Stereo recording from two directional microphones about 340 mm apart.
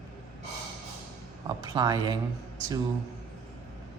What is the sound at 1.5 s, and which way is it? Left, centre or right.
Speech, centre.